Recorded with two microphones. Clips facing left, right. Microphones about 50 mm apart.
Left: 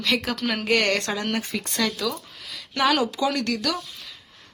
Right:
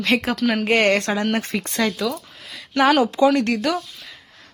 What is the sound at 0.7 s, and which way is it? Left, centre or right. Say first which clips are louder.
Speech: right 3 dB; right.